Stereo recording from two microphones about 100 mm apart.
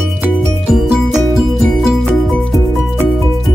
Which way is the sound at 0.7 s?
5° right (ahead or behind).